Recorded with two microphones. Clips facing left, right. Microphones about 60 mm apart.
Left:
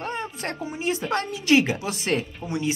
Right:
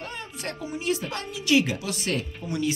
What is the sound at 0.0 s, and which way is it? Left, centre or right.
A woman's voice, left.